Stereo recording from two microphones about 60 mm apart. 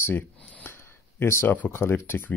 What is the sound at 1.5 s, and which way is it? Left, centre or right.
Speech, left.